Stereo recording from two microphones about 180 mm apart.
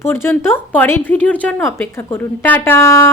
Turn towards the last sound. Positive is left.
turn(degrees=15)  # may be behind; listen again after turning